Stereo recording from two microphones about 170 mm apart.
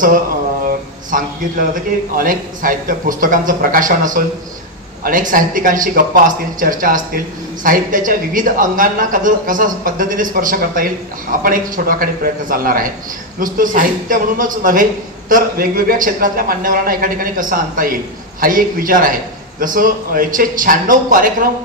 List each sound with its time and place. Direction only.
1.1 s a man's voice: 55° right (ahead or behind)